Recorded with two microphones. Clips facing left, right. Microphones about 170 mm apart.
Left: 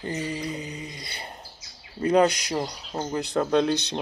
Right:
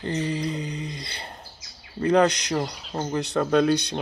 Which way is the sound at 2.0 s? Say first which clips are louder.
Right 1 dB; 10° left (ahead or behind).